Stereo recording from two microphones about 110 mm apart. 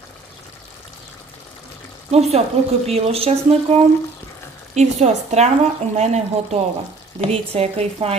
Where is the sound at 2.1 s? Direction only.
75° right (ahead or behind).